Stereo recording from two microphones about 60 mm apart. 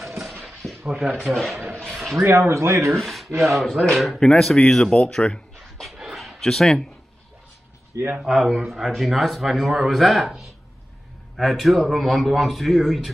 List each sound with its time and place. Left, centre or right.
0.7 s a sound: centre
1.5 s a man's voice: centre
2.2 s speech: right
3.0 s a man's voice: centre
5.9 s a sound: centre
6.5 s speech: centre
7.9 s a man's voice: right
8.2 s a man's voice: centre